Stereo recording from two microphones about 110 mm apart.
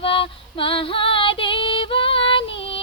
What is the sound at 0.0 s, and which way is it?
Female singing, 55° left (ahead or behind).